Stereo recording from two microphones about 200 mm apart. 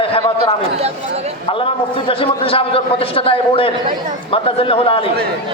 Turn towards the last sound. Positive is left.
turn(degrees=25)  # may be behind; listen again after turning